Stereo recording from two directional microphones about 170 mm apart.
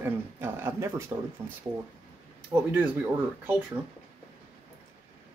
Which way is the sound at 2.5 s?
10° right (ahead or behind).